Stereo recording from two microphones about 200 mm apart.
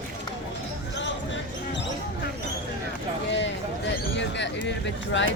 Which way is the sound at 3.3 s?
60° left (ahead or behind).